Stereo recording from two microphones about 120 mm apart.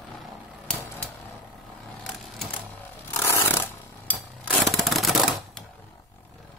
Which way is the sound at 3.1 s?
20° left (ahead or behind).